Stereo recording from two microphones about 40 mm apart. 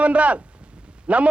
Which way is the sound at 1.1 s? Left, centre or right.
Right.